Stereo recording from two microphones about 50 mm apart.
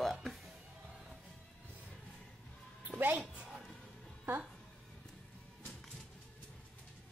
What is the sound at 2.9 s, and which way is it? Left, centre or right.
Speech, right.